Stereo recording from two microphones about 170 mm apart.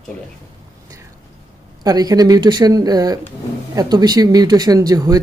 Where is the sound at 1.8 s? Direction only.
20° right (ahead or behind).